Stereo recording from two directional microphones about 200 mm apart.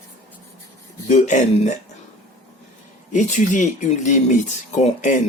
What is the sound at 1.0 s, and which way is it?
Speech, 35° left (ahead or behind).